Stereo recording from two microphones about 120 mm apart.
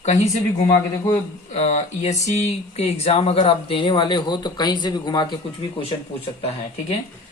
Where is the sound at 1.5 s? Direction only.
65° left (ahead or behind); by 5.2 s 35° left (ahead or behind).